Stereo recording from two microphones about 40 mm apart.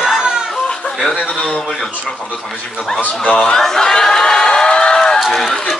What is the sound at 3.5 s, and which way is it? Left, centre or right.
Crowd, centre.